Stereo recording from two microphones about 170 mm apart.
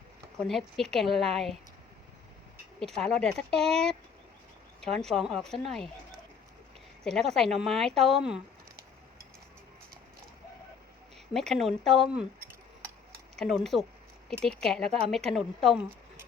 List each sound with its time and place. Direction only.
0.3 s speech: centre (ahead or behind)
2.8 s speech: centre (ahead or behind)
7.0 s speech: centre (ahead or behind)
11.3 s speech: centre (ahead or behind)
13.3 s speech: centre (ahead or behind)